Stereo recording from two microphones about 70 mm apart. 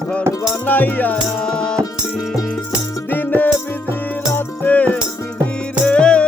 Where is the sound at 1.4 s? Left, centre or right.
Centre.